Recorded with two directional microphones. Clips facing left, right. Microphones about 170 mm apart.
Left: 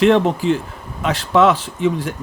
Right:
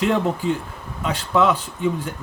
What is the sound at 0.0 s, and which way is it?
Speech, 90° left.